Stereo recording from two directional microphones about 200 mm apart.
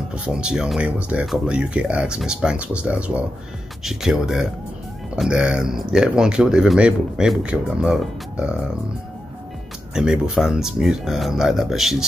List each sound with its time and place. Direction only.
0.1 s speech: 5° right (ahead or behind)
9.9 s speech: 5° right (ahead or behind)